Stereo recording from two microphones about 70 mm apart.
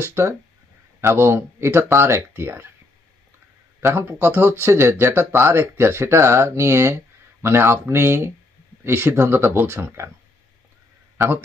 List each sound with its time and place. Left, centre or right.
0.0 s speech: right
3.9 s speech: right